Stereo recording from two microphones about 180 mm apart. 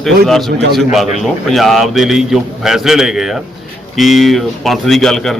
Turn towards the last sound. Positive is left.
turn(degrees=0)  # may be behind; listen again after turning